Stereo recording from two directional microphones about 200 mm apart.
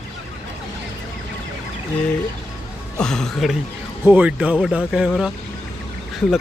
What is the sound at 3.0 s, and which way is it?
Speech, 5° left (ahead or behind).